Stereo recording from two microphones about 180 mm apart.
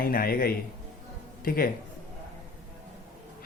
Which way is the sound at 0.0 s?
55° left (ahead or behind).